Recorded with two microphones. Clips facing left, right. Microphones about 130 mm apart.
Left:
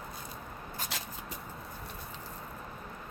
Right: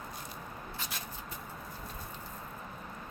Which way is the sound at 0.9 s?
90° left.